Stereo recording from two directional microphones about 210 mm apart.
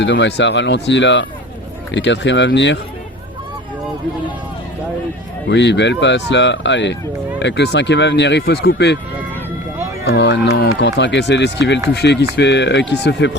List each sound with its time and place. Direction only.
0.0 s speech: 60° left (ahead or behind)
5.5 s speech: 55° left (ahead or behind)
10.0 s speech: 55° left (ahead or behind)